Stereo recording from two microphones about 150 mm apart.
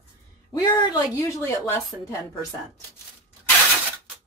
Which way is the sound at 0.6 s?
25° left (ahead or behind).